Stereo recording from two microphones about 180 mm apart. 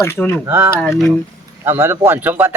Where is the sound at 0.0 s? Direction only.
15° left (ahead or behind).